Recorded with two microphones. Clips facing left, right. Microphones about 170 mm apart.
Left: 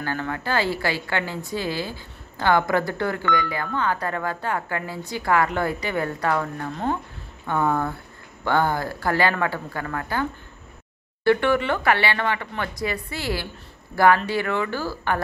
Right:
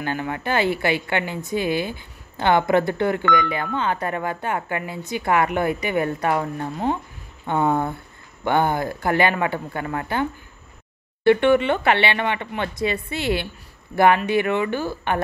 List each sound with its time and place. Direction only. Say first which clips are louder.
0.0 s a woman's voice: right 2 dB; 20° right (ahead or behind)
11.2 s a woman's voice: right 4 dB; 20° right (ahead or behind)